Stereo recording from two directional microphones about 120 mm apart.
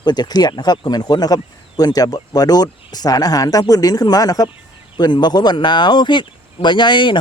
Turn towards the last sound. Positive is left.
turn(degrees=40)  # may be behind; listen again after turning